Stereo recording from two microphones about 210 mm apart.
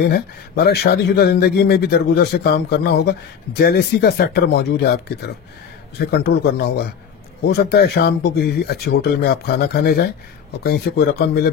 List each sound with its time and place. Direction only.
0.1 s speech: 50° left (ahead or behind)